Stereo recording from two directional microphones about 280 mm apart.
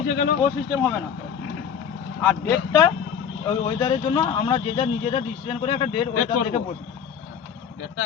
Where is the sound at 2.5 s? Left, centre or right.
Centre.